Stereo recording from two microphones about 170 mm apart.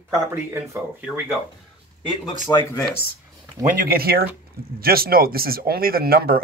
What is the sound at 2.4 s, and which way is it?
Speech, 20° left (ahead or behind).